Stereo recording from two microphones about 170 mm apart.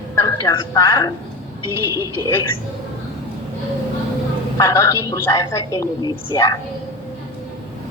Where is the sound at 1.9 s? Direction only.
15° right (ahead or behind).